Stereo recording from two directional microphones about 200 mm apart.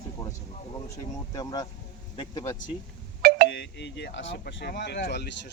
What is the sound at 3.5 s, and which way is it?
Speech, 60° left (ahead or behind).